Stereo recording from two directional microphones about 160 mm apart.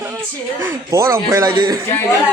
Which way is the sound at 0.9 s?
20° right (ahead or behind).